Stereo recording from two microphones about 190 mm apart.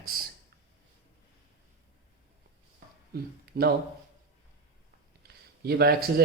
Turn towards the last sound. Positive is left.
turn(degrees=-55)  # may be behind; listen again after turning